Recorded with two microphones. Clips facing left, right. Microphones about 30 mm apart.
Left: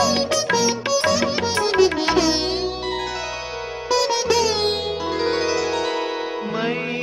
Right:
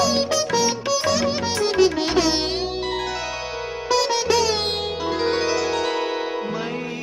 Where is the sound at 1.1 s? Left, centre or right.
Centre.